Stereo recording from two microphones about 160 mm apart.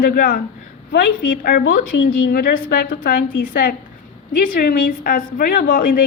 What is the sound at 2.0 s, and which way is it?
A woman's voice, 65° left (ahead or behind).